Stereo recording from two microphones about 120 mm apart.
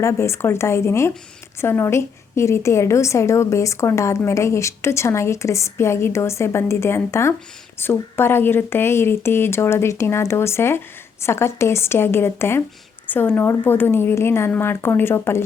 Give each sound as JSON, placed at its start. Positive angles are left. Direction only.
{"t": 0.0, "sound": "a woman's voice", "side_deg": 25}